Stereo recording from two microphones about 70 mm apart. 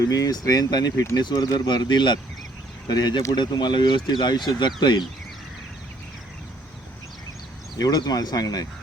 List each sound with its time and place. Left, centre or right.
0.0 s speech: left
7.8 s speech: left